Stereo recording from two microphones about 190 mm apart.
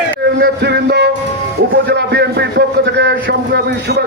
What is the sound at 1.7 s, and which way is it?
A man's voice, 60° right (ahead or behind).